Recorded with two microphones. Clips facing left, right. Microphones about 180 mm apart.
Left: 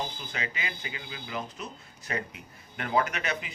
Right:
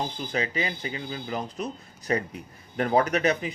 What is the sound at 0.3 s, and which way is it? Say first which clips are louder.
Speech: right 9 dB; 35° right (ahead or behind).